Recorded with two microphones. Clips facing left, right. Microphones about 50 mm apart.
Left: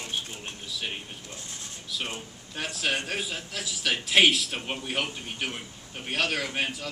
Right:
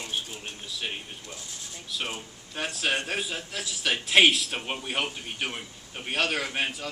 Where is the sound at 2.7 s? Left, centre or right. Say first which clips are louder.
Right 1 dB; centre.